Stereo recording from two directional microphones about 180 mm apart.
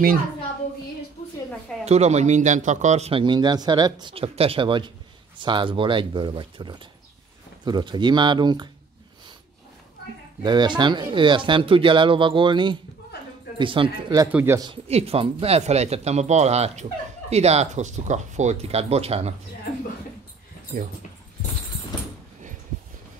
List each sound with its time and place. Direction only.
1.2 s a sound: 35° left (ahead or behind)
1.9 s speech: 40° right (ahead or behind)
10.4 s speech: 25° right (ahead or behind)
14.7 s speech: 35° right (ahead or behind)
20.7 s speech: 45° right (ahead or behind)